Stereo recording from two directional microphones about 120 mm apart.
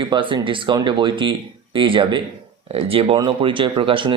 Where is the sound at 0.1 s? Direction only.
40° right (ahead or behind).